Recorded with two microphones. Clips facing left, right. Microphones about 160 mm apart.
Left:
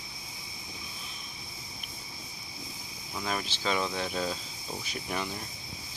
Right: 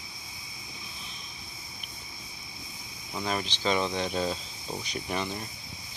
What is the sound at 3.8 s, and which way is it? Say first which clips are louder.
Speech: right 3 dB; 20° right (ahead or behind).